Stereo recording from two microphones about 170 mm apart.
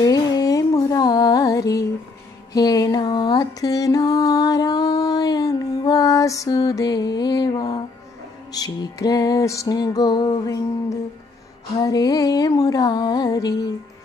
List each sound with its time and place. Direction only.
0.0 s music: 20° left (ahead or behind)